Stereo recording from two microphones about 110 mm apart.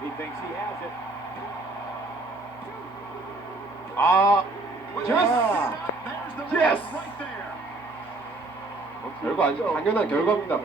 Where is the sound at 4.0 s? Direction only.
25° left (ahead or behind).